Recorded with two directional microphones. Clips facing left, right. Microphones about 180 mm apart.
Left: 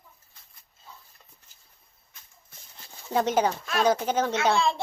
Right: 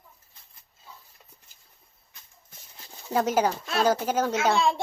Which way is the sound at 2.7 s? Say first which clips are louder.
Even; 5° right (ahead or behind).